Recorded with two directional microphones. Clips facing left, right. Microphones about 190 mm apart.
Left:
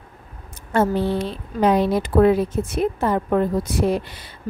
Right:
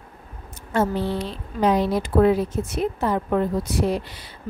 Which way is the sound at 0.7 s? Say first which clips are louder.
Left 3 dB; 55° left (ahead or behind).